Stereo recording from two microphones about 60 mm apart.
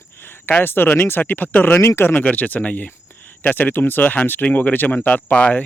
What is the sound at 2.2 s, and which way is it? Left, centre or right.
Speech, left.